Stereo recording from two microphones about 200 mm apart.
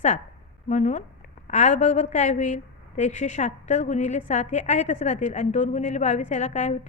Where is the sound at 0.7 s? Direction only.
35° left (ahead or behind).